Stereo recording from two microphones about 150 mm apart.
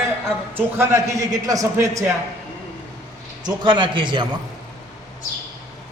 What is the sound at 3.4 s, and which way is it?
Speech, 30° right (ahead or behind).